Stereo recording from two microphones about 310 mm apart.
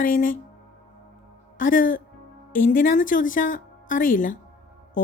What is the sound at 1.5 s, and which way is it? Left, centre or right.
A woman's voice, left.